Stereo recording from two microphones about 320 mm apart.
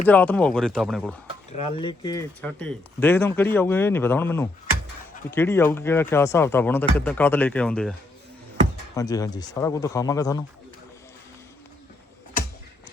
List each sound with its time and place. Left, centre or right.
0.1 s speech: centre
1.5 s speech: centre
9.0 s speech: centre